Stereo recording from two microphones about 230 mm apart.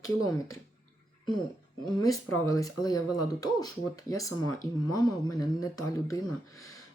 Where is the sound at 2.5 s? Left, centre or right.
Centre.